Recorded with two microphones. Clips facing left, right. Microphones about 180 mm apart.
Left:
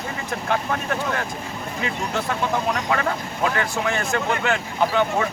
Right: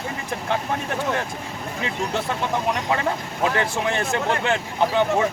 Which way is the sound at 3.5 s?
25° right (ahead or behind).